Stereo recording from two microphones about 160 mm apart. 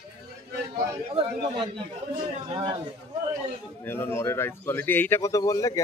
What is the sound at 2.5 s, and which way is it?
Speech, 30° right (ahead or behind).